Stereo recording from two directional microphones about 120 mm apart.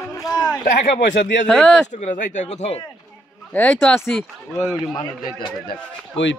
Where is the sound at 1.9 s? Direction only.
90° left; by 2.8 s 65° left (ahead or behind).